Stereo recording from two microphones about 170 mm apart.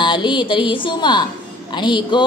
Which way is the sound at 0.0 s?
30° left (ahead or behind).